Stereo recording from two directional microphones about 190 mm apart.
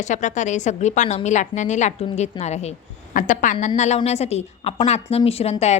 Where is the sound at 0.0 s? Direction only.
40° left (ahead or behind).